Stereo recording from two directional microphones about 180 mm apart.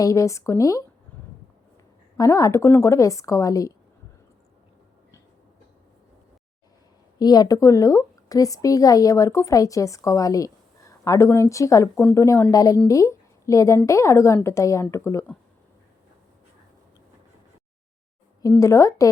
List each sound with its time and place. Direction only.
0.0 s a woman's voice: 20° left (ahead or behind)
2.1 s a woman's voice: 20° left (ahead or behind)
7.2 s a woman's voice: 20° left (ahead or behind)
18.5 s a woman's voice: 15° left (ahead or behind)